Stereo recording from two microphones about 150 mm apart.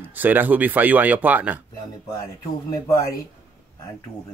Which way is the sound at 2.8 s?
20° left (ahead or behind).